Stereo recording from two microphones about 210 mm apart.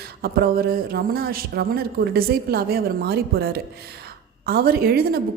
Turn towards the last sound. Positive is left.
turn(degrees=-45)  # may be behind; listen again after turning